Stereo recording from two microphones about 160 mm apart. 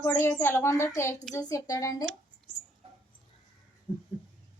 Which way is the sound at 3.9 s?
10° right (ahead or behind).